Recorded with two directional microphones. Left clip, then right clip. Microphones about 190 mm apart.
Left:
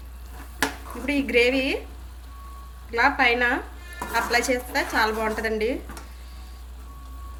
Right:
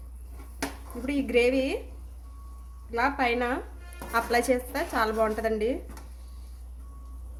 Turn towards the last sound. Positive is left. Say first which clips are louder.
# left 2 dB
turn(degrees=-20)  # may be behind; listen again after turning